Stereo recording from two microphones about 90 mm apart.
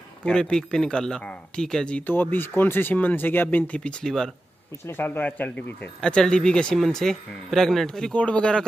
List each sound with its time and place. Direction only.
0.2 s speech: 10° left (ahead or behind)
4.8 s speech: 25° left (ahead or behind)
5.9 s speech: 10° left (ahead or behind)